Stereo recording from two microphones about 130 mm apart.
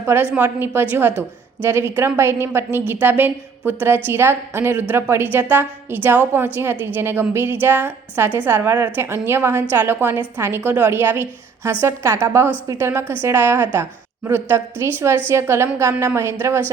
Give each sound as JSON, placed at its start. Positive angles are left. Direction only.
{"t": 0.0, "sound": "a woman's voice", "side_deg": -20}